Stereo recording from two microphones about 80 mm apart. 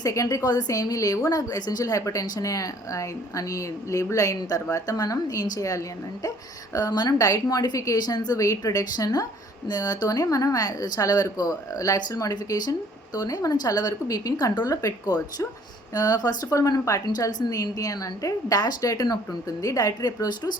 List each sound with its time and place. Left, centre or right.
0.0 s a woman's voice: left
7.9 s a woman's voice: left